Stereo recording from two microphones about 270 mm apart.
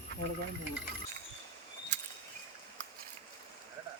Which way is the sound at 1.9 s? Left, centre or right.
Right.